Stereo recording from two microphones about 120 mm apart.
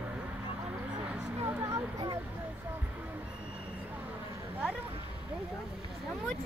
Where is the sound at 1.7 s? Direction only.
35° right (ahead or behind).